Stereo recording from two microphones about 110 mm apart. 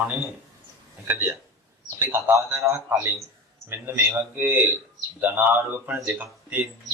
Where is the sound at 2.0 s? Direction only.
20° right (ahead or behind).